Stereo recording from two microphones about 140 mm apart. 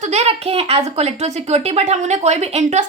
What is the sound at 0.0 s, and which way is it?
A woman's voice, 50° right (ahead or behind).